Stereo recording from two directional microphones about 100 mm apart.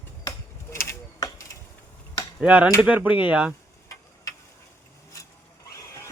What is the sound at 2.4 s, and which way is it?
Speech, 15° right (ahead or behind).